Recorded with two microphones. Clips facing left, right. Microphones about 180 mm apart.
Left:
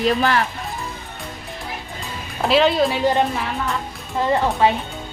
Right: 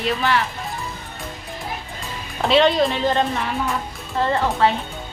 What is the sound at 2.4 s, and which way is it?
A woman's voice, centre (ahead or behind).